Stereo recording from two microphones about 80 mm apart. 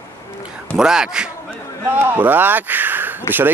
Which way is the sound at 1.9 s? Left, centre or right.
Right.